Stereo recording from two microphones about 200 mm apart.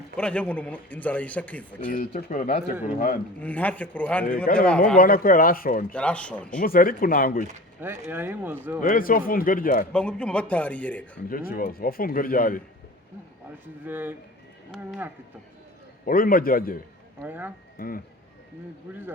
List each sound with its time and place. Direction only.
0.2 s a man's voice: 5° left (ahead or behind)
1.9 s speech: 40° left (ahead or behind)
3.4 s a man's voice: 5° left (ahead or behind)
4.9 s speech: 45° left (ahead or behind)
5.9 s speech: 5° left (ahead or behind)
6.6 s speech: 45° left (ahead or behind)
7.8 s speech: 10° right (ahead or behind)
8.8 s speech: 45° left (ahead or behind)
9.9 s a man's voice: 5° left (ahead or behind)
11.3 s speech: 45° left (ahead or behind)
13.8 s speech: 10° right (ahead or behind)
16.0 s speech: 45° left (ahead or behind)
17.2 s speech: 10° right (ahead or behind)
17.7 s speech: 45° left (ahead or behind)